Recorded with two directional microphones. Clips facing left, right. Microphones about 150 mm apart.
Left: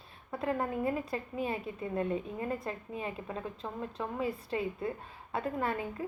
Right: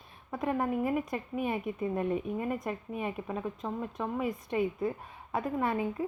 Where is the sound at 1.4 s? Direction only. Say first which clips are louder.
Right 5 dB; 20° right (ahead or behind).